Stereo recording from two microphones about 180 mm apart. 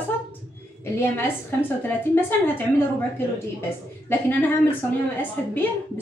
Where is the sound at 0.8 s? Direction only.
10° left (ahead or behind).